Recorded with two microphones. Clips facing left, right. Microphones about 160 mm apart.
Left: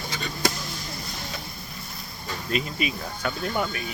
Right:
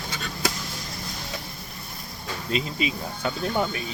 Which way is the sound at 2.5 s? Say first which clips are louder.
Right 1 dB; 25° right (ahead or behind).